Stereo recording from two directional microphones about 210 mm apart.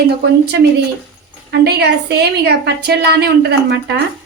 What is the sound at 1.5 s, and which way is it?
A woman's voice, 50° right (ahead or behind).